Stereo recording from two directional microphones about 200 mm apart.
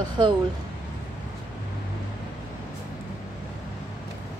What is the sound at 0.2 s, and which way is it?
Speech, 25° right (ahead or behind).